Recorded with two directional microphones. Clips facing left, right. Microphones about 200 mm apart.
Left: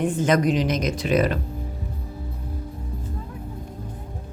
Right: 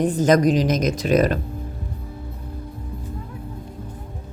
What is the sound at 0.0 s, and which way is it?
A woman's voice, 40° right (ahead or behind).